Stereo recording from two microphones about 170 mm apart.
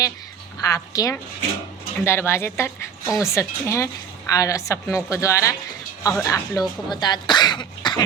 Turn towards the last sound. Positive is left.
turn(degrees=25)  # may be behind; listen again after turning